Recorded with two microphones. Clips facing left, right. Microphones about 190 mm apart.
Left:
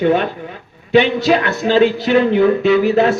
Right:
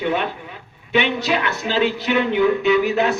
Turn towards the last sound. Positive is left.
turn(degrees=35)  # may be behind; listen again after turning